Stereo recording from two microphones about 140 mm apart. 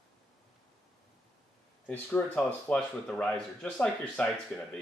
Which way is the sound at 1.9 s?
10° left (ahead or behind).